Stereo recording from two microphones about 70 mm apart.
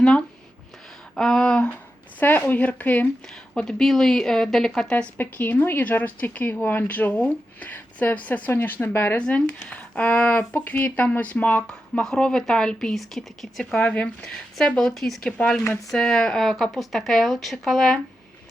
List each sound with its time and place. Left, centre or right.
0.0 s a sound: centre
1.1 s speech: centre
2.1 s speech: left
3.5 s speech: centre
5.1 s speech: left
9.1 s speech: centre
11.6 s speech: centre
13.8 s speech: centre